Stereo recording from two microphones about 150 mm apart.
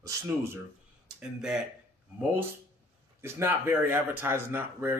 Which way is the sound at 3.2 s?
15° right (ahead or behind).